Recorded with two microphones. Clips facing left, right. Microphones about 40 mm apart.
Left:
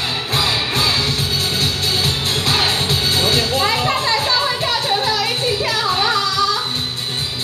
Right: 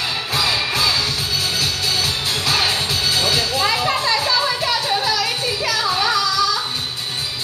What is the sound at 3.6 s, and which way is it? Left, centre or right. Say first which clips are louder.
Children playing: left 1 dB; left.